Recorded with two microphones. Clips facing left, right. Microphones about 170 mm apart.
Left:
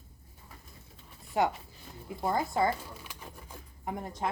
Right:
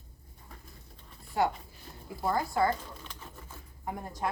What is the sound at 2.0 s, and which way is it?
Speech, 20° left (ahead or behind).